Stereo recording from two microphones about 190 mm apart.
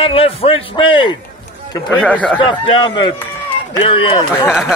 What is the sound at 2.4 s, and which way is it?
A man's voice, 25° left (ahead or behind).